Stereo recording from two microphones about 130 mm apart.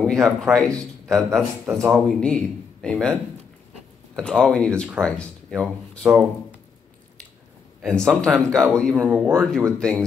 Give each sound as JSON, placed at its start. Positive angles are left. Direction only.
{"t": 0.0, "sound": "speech", "side_deg": 5}
{"t": 1.7, "sound": "speech", "side_deg": -20}
{"t": 2.0, "sound": "speech", "side_deg": 5}
{"t": 6.0, "sound": "speech", "side_deg": -5}
{"t": 7.8, "sound": "speech", "side_deg": 5}
{"t": 8.9, "sound": "speech", "side_deg": -10}
{"t": 9.3, "sound": "speech", "side_deg": 5}